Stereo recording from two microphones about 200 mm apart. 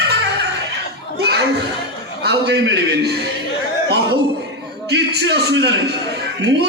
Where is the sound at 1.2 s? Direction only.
55° right (ahead or behind).